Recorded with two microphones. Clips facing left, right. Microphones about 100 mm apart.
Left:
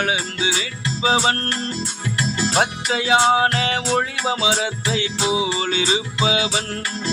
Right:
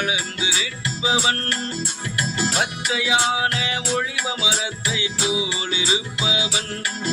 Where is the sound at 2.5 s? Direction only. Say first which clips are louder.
Left 4 dB; 45° left (ahead or behind).